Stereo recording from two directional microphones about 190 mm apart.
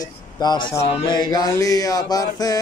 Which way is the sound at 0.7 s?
20° left (ahead or behind).